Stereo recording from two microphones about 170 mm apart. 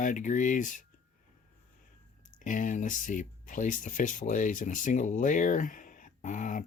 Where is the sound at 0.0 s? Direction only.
50° left (ahead or behind).